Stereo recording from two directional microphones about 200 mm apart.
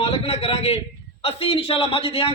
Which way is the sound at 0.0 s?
30° left (ahead or behind).